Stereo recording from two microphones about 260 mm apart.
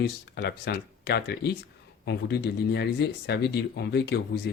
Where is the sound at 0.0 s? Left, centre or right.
Left.